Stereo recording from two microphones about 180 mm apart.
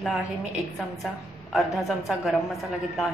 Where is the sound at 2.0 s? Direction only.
Centre (ahead or behind).